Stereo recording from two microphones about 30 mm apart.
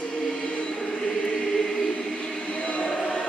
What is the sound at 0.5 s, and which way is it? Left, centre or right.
Choir, left.